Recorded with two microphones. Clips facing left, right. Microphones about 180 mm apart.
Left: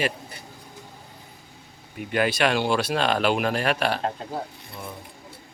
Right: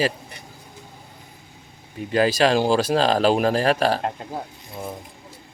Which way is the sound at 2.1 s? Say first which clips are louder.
Right 4 dB; 35° right (ahead or behind).